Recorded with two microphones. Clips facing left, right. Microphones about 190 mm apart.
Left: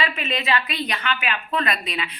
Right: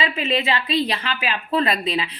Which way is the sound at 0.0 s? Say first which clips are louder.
Right 4 dB; 30° right (ahead or behind).